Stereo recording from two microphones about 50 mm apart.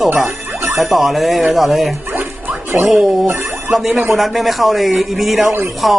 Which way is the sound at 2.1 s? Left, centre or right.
Right.